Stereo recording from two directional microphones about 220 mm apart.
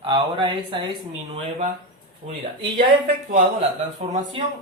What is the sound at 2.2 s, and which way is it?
Speech, 35° right (ahead or behind).